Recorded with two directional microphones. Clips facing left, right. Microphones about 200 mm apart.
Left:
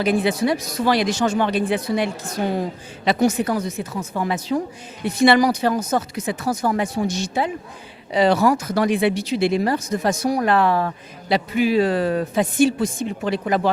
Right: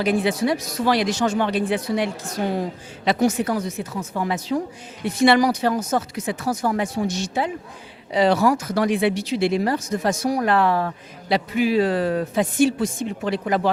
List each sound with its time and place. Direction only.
0.0 s speech: 10° left (ahead or behind)
7.0 s speech: 15° left (ahead or behind)